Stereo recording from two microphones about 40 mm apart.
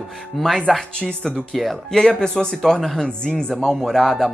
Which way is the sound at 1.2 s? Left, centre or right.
Centre.